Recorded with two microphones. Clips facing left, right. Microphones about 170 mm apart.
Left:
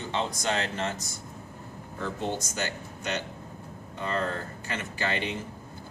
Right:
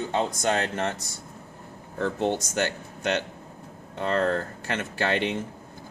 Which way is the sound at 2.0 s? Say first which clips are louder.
Right 6 dB; 60° right (ahead or behind).